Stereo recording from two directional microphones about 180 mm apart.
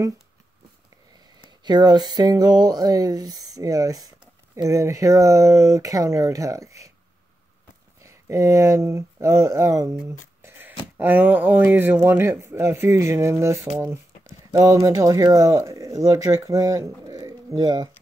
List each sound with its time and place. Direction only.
1.4 s speech: 25° right (ahead or behind)
8.0 s speech: 15° right (ahead or behind)
10.0 s a sound: 15° right (ahead or behind)
11.0 s speech: 10° right (ahead or behind)